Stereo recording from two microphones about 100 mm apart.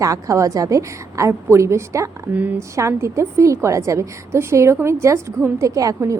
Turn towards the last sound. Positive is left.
turn(degrees=-30)  # may be behind; listen again after turning